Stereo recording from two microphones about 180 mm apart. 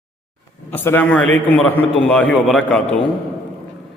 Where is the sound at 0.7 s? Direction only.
10° left (ahead or behind).